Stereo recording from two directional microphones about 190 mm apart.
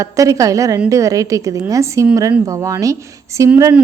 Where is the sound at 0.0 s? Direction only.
15° right (ahead or behind).